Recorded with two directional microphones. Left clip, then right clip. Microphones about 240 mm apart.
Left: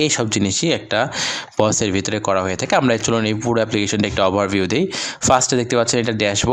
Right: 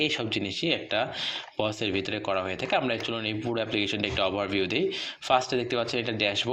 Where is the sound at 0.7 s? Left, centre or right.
Centre.